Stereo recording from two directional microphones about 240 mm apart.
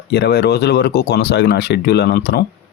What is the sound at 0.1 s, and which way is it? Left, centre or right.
Speech, left.